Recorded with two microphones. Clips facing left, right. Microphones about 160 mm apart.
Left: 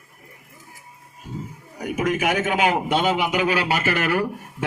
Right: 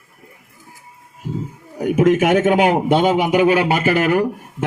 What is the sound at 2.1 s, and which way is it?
A man's voice, 50° right (ahead or behind).